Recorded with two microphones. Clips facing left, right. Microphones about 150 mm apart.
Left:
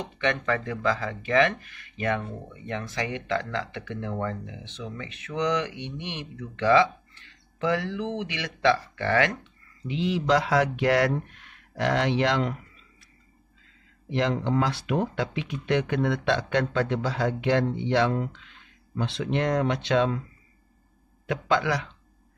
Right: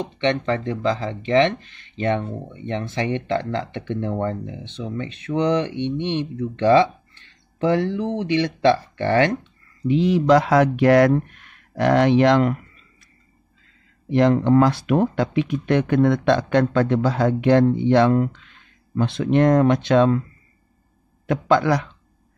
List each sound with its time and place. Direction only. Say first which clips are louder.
0.0 s speech: right 6 dB; 25° right (ahead or behind)
9.8 s speech: right 8 dB; 45° right (ahead or behind)
14.1 s speech: right 9 dB; 50° right (ahead or behind)
21.3 s speech: right 7 dB; 45° right (ahead or behind)